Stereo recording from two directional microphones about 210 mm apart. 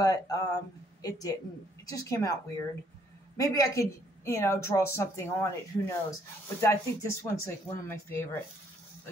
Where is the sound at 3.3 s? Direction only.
15° left (ahead or behind).